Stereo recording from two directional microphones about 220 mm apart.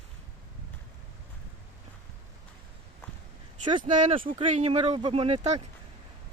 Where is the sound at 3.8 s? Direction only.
35° right (ahead or behind).